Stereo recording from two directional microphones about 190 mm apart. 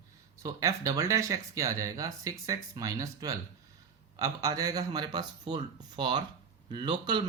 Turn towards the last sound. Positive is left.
turn(degrees=-20)  # may be behind; listen again after turning